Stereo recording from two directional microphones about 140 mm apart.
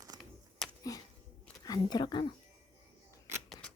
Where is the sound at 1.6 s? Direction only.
30° left (ahead or behind).